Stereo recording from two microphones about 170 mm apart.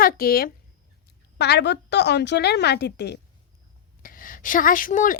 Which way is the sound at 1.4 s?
80° left.